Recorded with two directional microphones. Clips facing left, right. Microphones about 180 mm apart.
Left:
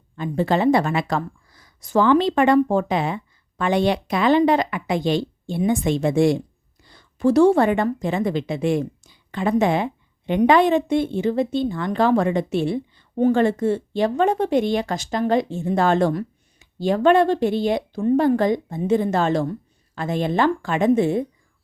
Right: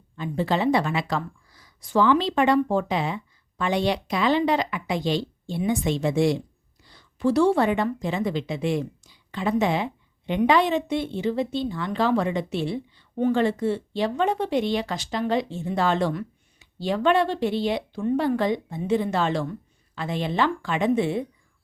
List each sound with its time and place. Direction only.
0.2 s a woman's voice: 50° left (ahead or behind)